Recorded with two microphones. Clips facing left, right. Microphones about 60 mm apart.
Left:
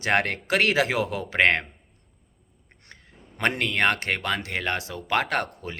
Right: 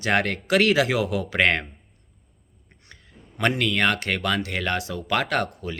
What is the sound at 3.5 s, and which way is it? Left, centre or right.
A man's voice, left.